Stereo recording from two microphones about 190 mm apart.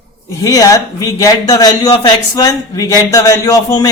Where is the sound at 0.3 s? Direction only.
20° left (ahead or behind).